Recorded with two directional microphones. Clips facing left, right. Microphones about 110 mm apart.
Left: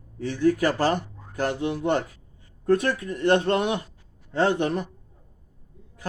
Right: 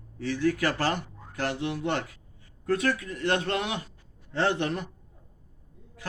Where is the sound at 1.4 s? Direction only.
35° left (ahead or behind).